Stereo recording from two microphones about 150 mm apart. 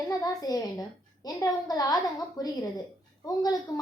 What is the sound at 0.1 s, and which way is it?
A woman's voice, 25° left (ahead or behind).